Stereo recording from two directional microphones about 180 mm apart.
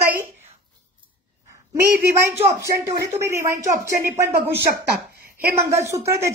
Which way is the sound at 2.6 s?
15° right (ahead or behind).